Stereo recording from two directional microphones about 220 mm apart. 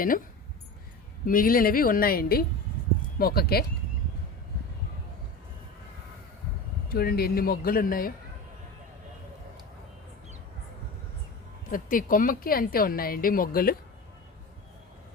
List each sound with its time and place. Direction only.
1.2 s a woman's voice: 40° left (ahead or behind)
6.8 s speech: 45° left (ahead or behind)
11.7 s a woman's voice: 40° left (ahead or behind)